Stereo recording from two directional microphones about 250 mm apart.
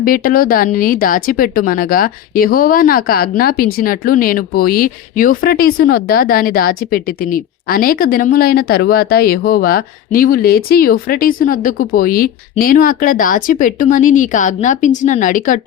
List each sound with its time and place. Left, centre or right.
0.0 s speech: left